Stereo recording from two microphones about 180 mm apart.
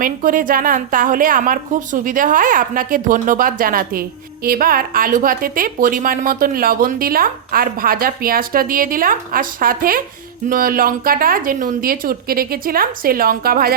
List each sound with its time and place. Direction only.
0.0 s a woman's voice: 50° right (ahead or behind)